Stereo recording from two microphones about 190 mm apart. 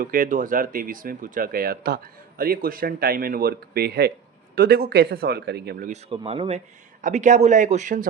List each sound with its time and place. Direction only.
0.0 s speech: 45° right (ahead or behind)
5.9 s speech: 30° right (ahead or behind)